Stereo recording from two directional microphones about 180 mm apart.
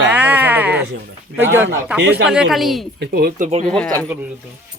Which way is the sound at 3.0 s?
60° right (ahead or behind).